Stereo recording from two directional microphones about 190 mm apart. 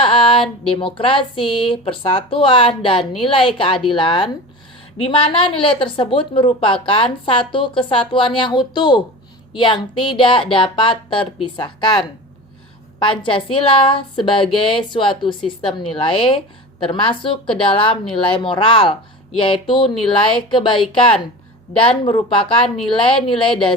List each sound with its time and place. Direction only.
0.0 s speech: 25° left (ahead or behind)